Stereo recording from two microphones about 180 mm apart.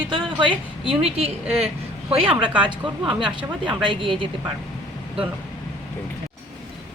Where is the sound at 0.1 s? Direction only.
25° right (ahead or behind).